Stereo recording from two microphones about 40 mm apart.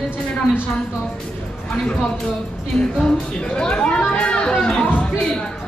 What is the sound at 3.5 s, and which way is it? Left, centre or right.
Speech, centre.